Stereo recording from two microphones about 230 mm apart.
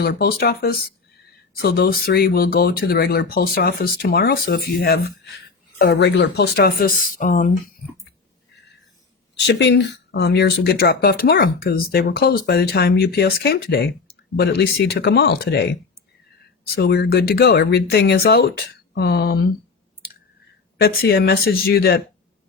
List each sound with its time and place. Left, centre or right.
0.0 s speech: left
5.8 s speech: left
9.5 s speech: left
16.7 s speech: left
20.8 s speech: left